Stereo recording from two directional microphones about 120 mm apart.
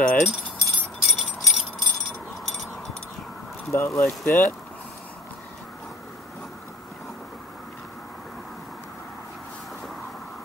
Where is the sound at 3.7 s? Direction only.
25° left (ahead or behind).